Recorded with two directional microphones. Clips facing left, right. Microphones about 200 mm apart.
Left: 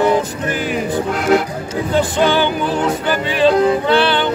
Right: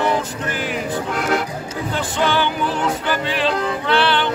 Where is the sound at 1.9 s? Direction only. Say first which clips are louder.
Left 6 dB; 15° left (ahead or behind).